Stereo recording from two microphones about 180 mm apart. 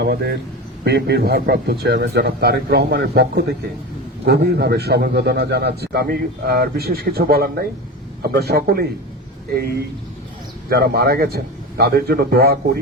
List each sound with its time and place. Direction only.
0.0 s a man's voice: 60° right (ahead or behind)
10.7 s a man's voice: 60° right (ahead or behind)